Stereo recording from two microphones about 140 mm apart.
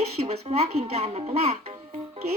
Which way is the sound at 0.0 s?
50° right (ahead or behind).